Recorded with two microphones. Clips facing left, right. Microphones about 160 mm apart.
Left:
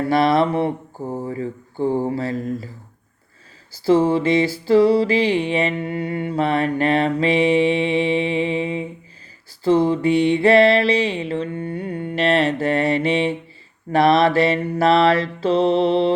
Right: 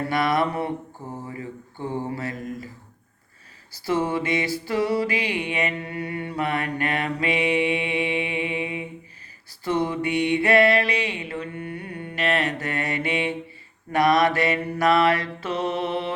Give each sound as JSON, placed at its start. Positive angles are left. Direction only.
{"t": 0.1, "sound": "music", "side_deg": 30}
{"t": 1.1, "sound": "mantra", "side_deg": 30}
{"t": 2.0, "sound": "music", "side_deg": 30}
{"t": 3.8, "sound": "music", "side_deg": 30}